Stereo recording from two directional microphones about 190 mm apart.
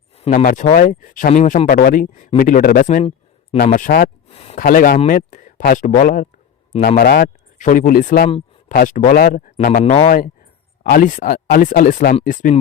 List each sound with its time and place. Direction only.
0.2 s speech: 40° left (ahead or behind)
4.3 s speech: 35° left (ahead or behind)
4.6 s speech: 50° left (ahead or behind)
7.0 s speech: 55° left (ahead or behind)